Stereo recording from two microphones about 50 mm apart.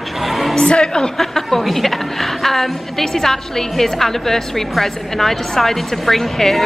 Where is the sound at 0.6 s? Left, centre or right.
Centre.